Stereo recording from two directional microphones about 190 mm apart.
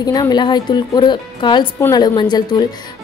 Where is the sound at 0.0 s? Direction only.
20° left (ahead or behind).